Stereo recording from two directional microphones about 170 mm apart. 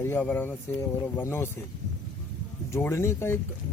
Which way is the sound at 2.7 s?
15° left (ahead or behind).